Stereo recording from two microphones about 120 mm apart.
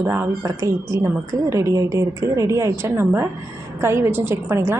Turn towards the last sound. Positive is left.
turn(degrees=-20)  # may be behind; listen again after turning